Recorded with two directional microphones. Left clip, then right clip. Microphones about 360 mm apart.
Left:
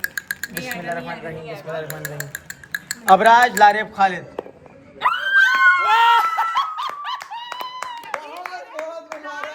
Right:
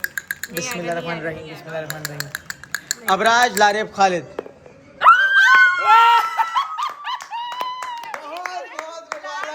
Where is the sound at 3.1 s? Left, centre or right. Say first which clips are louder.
Left 4 dB; centre.